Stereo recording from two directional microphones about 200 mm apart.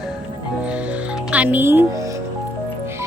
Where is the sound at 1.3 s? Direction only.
5° right (ahead or behind).